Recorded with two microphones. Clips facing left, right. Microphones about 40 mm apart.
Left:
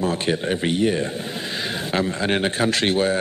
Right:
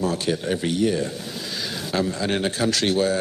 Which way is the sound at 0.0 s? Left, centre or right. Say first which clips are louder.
Left 2 dB; left.